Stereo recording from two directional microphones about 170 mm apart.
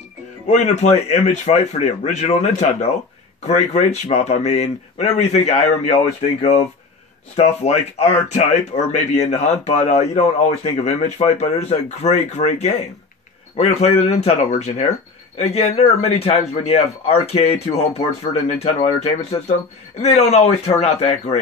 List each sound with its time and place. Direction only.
0.5 s speech: 45° left (ahead or behind)
7.3 s speech: 40° left (ahead or behind)